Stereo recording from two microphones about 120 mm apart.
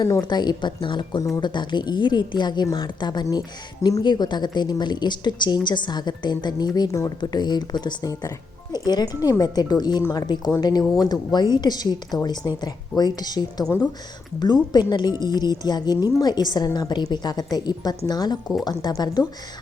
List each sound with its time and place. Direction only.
0.0 s a woman's voice: 35° left (ahead or behind)